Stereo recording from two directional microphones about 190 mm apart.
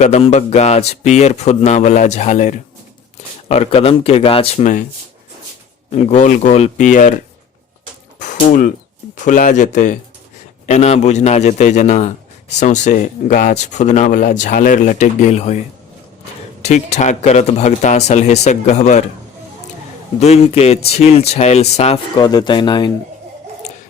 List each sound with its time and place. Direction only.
0.0 s a man's voice: 35° left (ahead or behind)
5.9 s a man's voice: 35° left (ahead or behind)
8.2 s a sound: 40° left (ahead or behind)
9.1 s a man's voice: 45° left (ahead or behind)
16.6 s a man's voice: 35° left (ahead or behind)
20.1 s a man's voice: 35° left (ahead or behind)
22.1 s speech: 20° left (ahead or behind)